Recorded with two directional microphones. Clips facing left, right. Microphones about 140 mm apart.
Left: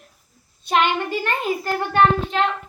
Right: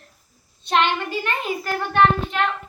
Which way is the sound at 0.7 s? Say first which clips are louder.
Left 1 dB; 5° left (ahead or behind).